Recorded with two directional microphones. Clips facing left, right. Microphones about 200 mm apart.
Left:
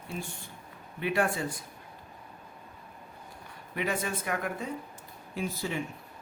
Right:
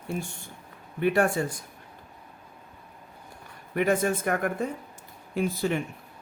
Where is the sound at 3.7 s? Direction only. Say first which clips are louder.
Right 8 dB; 45° right (ahead or behind).